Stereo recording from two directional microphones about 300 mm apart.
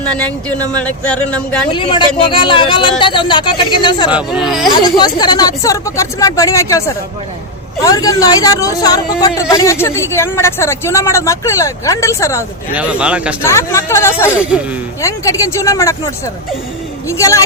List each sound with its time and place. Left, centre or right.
0.0 s speech: centre
1.7 s speech: centre
4.1 s speech: centre
4.7 s speech: centre
12.7 s speech: centre
13.4 s speech: centre